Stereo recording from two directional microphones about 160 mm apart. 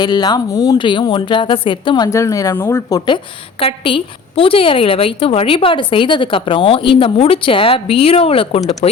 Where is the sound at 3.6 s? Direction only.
35° left (ahead or behind).